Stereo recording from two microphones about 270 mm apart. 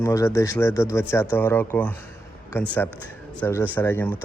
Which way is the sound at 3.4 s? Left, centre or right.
Centre.